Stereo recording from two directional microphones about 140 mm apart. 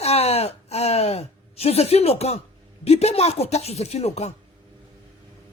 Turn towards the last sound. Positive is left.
turn(degrees=50)  # may be behind; listen again after turning